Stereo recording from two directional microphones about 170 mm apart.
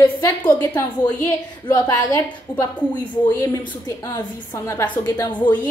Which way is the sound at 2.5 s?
25° left (ahead or behind).